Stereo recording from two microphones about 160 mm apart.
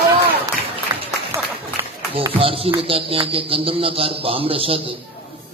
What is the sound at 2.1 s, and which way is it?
Speech, 35° right (ahead or behind).